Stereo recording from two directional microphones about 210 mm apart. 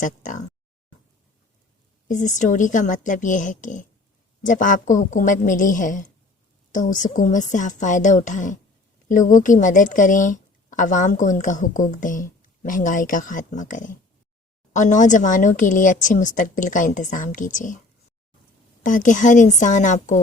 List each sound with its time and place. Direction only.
0.0 s speech: 35° left (ahead or behind)
2.0 s speech: 35° left (ahead or behind)
18.8 s speech: 35° left (ahead or behind)